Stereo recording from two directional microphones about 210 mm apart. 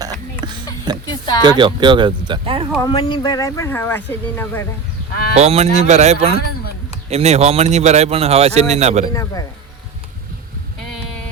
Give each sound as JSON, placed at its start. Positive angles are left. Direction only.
{"t": 0.4, "sound": "a sound", "side_deg": -20}
{"t": 0.9, "sound": "speech", "side_deg": -20}
{"t": 2.7, "sound": "speech", "side_deg": 20}
{"t": 5.3, "sound": "speech", "side_deg": -30}